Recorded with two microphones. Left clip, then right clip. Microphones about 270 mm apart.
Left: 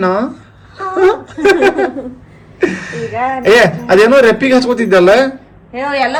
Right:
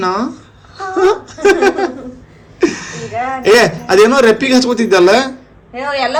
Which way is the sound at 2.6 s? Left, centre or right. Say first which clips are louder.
Even; centre.